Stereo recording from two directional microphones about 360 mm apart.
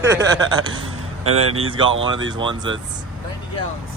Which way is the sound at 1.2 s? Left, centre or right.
Right.